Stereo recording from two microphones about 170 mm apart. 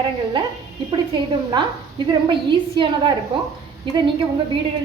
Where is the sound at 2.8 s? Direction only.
30° right (ahead or behind).